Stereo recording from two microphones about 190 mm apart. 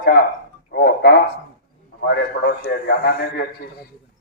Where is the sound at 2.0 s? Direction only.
70° left (ahead or behind).